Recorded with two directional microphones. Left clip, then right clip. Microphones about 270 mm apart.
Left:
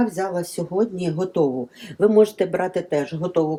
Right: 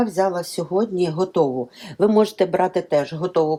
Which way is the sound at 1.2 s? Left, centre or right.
Right.